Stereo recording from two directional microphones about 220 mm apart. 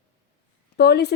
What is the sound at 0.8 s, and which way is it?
Speech, 45° left (ahead or behind).